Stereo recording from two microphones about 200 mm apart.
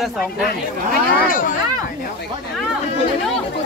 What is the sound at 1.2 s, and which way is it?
Speech, 45° left (ahead or behind).